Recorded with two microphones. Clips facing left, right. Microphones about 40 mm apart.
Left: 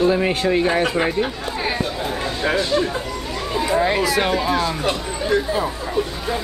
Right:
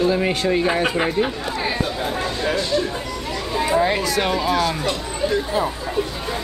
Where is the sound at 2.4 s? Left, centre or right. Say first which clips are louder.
Left 3 dB; left.